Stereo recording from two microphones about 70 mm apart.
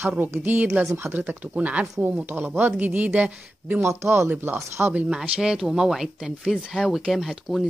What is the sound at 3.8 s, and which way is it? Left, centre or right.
Speech, right.